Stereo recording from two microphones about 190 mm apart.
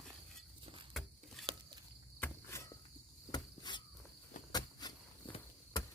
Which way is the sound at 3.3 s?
25° left (ahead or behind).